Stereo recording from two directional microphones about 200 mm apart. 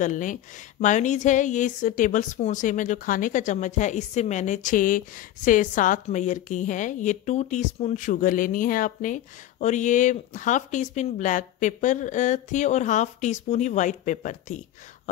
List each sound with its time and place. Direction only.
0.0 s a woman's voice: 40° left (ahead or behind)